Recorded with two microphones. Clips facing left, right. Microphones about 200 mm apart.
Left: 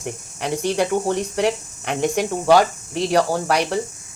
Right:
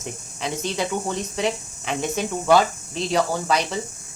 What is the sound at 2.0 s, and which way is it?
Speech, 15° left (ahead or behind).